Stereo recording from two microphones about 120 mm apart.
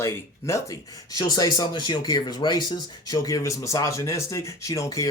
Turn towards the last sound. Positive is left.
turn(degrees=25)  # may be behind; listen again after turning